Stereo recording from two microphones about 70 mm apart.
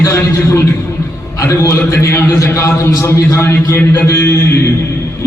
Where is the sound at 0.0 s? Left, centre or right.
Left.